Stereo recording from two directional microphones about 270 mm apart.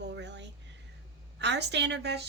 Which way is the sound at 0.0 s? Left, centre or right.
Right.